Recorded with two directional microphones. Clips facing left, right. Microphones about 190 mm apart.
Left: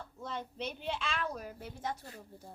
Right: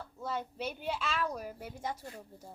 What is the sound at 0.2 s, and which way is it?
A woman's voice, 5° right (ahead or behind).